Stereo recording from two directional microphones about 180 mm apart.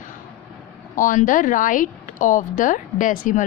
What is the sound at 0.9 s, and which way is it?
A woman's voice, 45° left (ahead or behind).